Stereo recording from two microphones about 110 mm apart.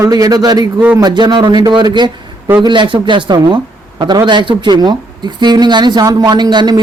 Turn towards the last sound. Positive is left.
turn(degrees=-40)  # may be behind; listen again after turning